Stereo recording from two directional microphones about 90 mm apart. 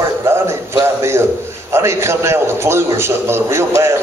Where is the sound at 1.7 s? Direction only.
30° right (ahead or behind).